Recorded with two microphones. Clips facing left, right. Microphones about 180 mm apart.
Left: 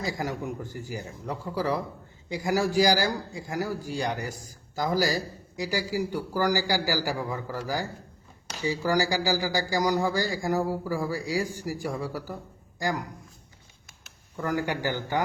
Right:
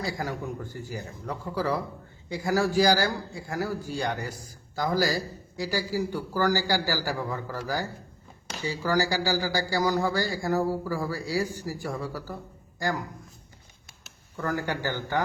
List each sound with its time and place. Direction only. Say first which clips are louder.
0.0 s a man's voice: left 1 dB; 15° left (ahead or behind)
14.3 s a man's voice: left 1 dB; 15° left (ahead or behind)